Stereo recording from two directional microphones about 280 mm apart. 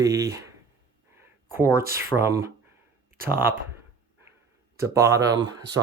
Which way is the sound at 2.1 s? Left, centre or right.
Centre.